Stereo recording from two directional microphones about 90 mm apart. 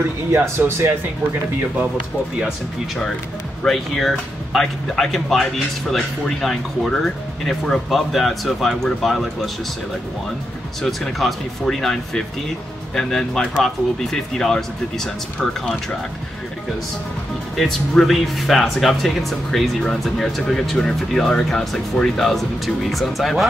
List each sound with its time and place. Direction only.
0.3 s speech: 25° right (ahead or behind)
3.6 s speech: centre (ahead or behind)
10.8 s speech: centre (ahead or behind)
17.6 s speech: centre (ahead or behind)